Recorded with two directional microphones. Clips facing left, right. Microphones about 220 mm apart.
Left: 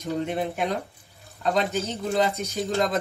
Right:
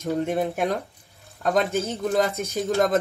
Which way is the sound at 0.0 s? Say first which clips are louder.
Right 3 dB; 45° right (ahead or behind).